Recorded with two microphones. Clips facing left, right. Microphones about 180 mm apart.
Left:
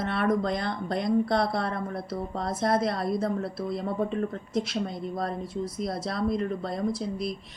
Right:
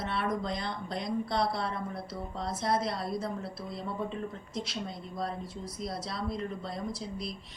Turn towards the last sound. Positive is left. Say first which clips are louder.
# left 8 dB
turn(degrees=50)  # may be behind; listen again after turning